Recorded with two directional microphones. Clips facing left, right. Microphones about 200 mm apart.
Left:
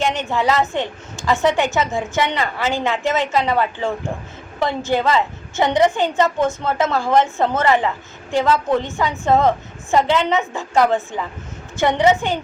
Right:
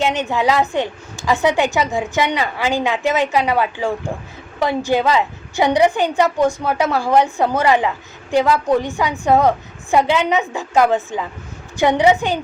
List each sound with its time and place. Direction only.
0.0 s a woman's voice: 15° right (ahead or behind)